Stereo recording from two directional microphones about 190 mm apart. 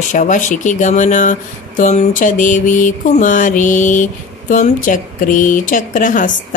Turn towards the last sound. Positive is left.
turn(degrees=45)  # may be behind; listen again after turning